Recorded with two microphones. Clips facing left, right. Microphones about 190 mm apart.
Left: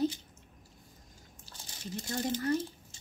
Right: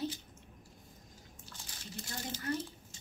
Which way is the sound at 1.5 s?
30° left (ahead or behind).